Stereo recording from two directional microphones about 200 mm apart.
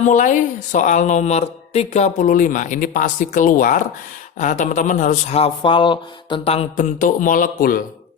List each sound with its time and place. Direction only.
0.0 s speech: 40° left (ahead or behind)